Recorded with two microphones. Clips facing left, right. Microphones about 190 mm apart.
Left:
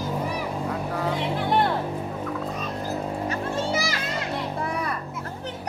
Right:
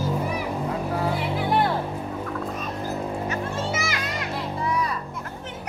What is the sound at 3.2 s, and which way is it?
Music, 35° left (ahead or behind).